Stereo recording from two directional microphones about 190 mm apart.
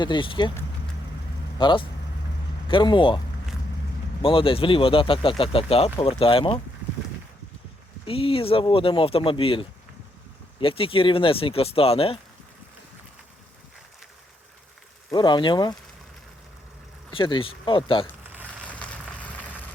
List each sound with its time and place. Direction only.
0.0 s speech: 25° left (ahead or behind)
1.5 s speech: 25° left (ahead or behind)
4.2 s speech: 30° left (ahead or behind)
8.0 s speech: 30° left (ahead or behind)
15.1 s speech: 25° left (ahead or behind)
17.1 s speech: 25° left (ahead or behind)
18.3 s a sound: 10° right (ahead or behind)
18.7 s a sound: 5° left (ahead or behind)